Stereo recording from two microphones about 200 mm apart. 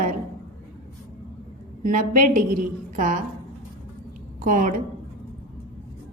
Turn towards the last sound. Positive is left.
turn(degrees=-40)  # may be behind; listen again after turning